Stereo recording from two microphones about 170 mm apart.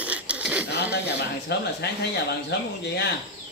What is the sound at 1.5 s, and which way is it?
Speech, 75° left (ahead or behind).